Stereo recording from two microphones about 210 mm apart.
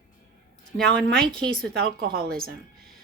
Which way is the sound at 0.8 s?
5° left (ahead or behind).